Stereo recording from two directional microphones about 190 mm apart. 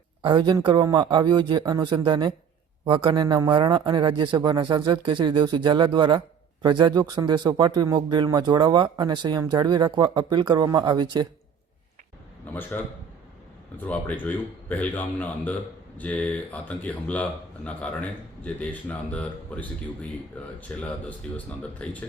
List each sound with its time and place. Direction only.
0.2 s a man's voice: 25° right (ahead or behind)
12.5 s speech: 10° left (ahead or behind)